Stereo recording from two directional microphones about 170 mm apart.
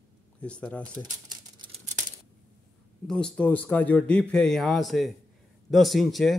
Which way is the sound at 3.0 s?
5° left (ahead or behind).